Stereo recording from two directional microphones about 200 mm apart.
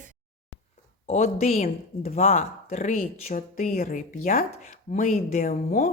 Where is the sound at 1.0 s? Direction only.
35° left (ahead or behind).